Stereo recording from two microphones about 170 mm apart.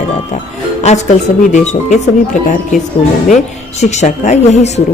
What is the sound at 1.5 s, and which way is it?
A woman's voice, 45° left (ahead or behind).